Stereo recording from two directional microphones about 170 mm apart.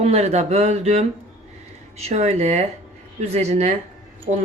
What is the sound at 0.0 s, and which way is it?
Speech, 40° right (ahead or behind).